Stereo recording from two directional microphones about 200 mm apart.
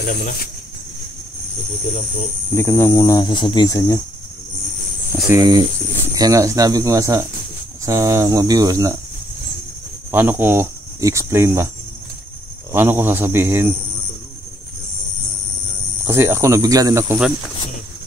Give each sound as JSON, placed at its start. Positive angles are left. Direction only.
{"t": 0.0, "sound": "speech", "side_deg": 45}
{"t": 2.5, "sound": "speech", "side_deg": 10}
{"t": 5.3, "sound": "speech", "side_deg": -20}
{"t": 10.1, "sound": "speech", "side_deg": -10}
{"t": 12.7, "sound": "speech", "side_deg": -10}
{"t": 16.1, "sound": "speech", "side_deg": -10}